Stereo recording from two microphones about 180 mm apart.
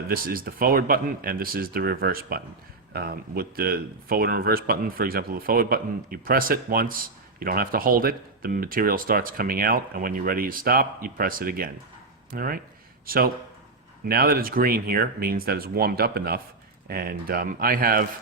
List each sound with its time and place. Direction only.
0.1 s speech: 55° right (ahead or behind)